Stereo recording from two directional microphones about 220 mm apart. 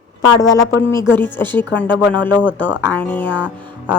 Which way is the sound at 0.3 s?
15° left (ahead or behind).